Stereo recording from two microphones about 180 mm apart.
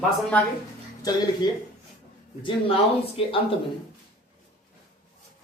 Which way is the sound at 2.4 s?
30° left (ahead or behind).